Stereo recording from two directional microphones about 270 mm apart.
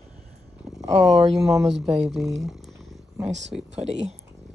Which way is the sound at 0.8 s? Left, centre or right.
Right.